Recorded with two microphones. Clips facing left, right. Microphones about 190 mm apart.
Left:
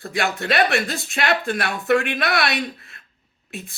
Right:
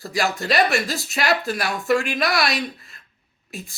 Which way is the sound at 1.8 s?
60° left (ahead or behind).